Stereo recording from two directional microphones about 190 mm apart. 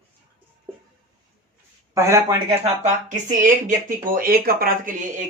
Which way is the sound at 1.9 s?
15° right (ahead or behind).